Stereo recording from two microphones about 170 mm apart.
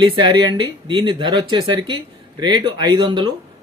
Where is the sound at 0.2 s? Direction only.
25° right (ahead or behind).